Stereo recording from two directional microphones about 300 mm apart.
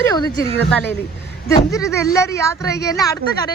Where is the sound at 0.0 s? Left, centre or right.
Centre.